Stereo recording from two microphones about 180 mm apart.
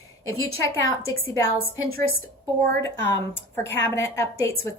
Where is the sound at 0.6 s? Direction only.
15° left (ahead or behind).